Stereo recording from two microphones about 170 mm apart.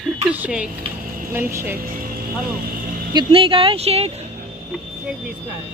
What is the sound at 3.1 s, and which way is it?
Speech, 30° right (ahead or behind).